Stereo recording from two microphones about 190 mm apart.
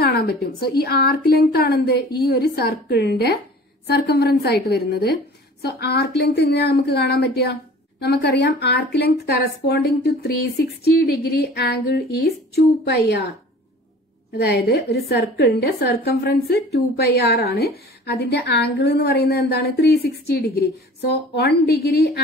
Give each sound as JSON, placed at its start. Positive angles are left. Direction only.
{"t": 0.0, "sound": "a woman's voice", "side_deg": 55}
{"t": 14.4, "sound": "a woman's voice", "side_deg": 55}